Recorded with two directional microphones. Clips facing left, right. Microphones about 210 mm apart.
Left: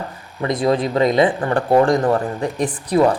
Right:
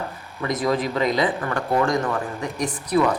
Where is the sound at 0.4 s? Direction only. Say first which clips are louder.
Left 4 dB; 30° left (ahead or behind).